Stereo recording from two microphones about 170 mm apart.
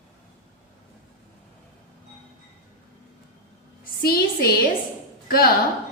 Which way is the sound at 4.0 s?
65° left (ahead or behind).